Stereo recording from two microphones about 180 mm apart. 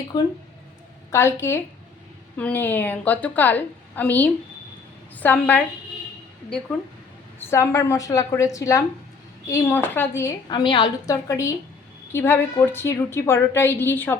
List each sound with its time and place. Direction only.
0.1 s a woman's voice: 25° left (ahead or behind)
1.1 s a woman's voice: 15° left (ahead or behind)
7.3 s a woman's voice: 15° left (ahead or behind)
10.5 s a woman's voice: 25° left (ahead or behind)